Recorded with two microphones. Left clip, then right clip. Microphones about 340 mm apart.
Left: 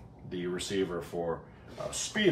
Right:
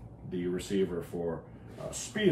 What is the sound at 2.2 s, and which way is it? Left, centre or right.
Speech, left.